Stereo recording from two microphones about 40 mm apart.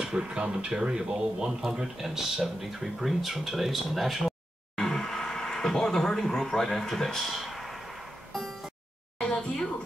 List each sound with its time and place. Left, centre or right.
0.0 s speech: centre
4.7 s speech: centre
7.2 s speech: centre
9.2 s a sound: centre